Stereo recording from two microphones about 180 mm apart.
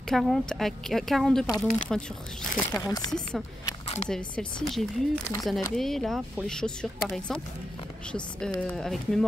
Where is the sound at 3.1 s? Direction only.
Centre (ahead or behind).